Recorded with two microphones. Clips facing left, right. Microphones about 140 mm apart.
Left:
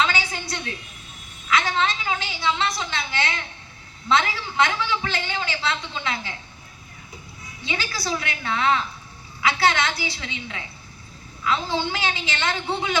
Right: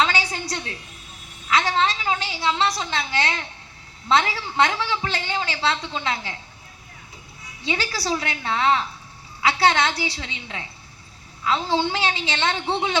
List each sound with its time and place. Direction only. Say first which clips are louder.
0.0 s a sound: right 1 dB; 35° right (ahead or behind)
1.5 s a woman's voice: right 1 dB; 35° right (ahead or behind)
7.6 s a woman's voice: right 3 dB; 30° right (ahead or behind)